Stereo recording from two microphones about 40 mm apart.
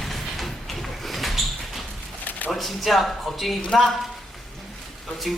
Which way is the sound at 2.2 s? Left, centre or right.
Left.